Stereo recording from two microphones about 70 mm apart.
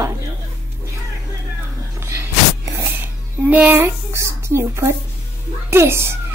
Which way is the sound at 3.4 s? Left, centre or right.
Right.